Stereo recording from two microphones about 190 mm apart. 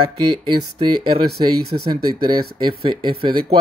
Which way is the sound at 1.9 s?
25° right (ahead or behind).